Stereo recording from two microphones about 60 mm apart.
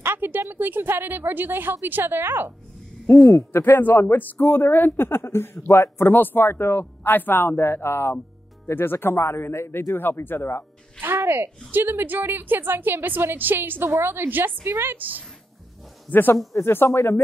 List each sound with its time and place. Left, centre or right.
0.0 s a woman's voice: right
3.1 s speech: left
3.6 s speech: left
11.0 s a woman's voice: right
16.1 s speech: left
16.9 s speech: left